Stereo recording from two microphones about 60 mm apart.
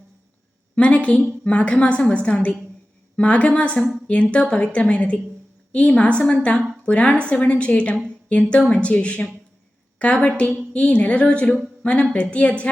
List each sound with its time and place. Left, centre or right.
0.8 s a woman's voice: left